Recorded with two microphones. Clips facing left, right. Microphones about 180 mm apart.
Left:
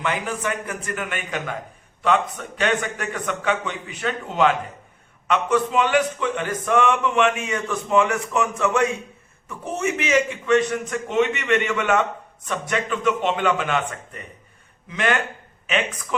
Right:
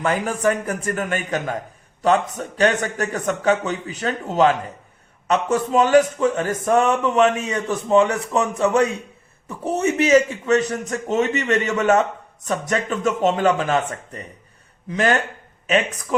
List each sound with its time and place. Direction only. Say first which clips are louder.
0.0 s a man's voice: right 6 dB; 45° right (ahead or behind)